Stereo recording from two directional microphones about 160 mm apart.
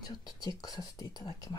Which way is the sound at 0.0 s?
25° left (ahead or behind).